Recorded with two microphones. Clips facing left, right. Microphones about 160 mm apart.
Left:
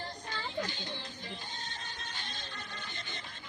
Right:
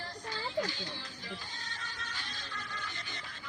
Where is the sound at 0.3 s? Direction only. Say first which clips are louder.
Right 3 dB; 20° left (ahead or behind).